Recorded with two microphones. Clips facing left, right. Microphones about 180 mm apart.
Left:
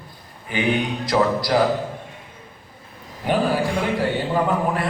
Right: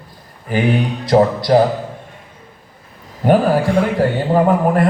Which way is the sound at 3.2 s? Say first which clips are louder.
Right 7 dB; 45° right (ahead or behind).